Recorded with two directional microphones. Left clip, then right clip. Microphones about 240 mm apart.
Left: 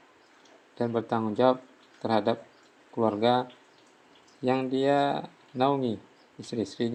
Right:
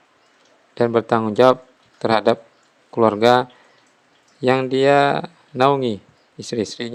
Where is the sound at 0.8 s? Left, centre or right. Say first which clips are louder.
Right 11 dB; right.